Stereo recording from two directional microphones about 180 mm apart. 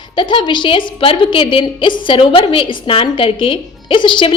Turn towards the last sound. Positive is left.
turn(degrees=25)  # may be behind; listen again after turning